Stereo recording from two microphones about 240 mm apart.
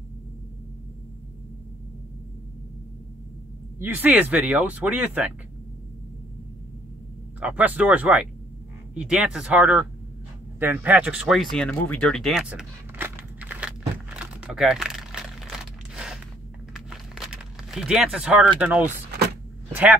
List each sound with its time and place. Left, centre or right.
3.8 s speech: centre
7.3 s speech: centre
10.6 s a sound: centre
16.7 s crumpling: centre
18.6 s speech: centre